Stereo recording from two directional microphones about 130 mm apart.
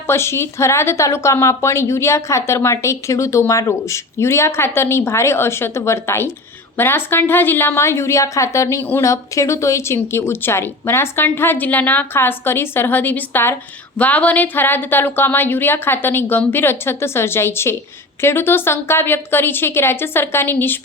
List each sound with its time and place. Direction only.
0.1 s a woman's voice: 20° left (ahead or behind)